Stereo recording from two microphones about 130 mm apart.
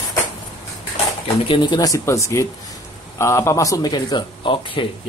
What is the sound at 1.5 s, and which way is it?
Speech, 35° left (ahead or behind).